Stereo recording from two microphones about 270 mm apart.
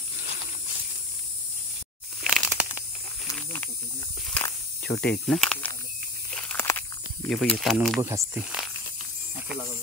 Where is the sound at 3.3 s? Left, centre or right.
Centre.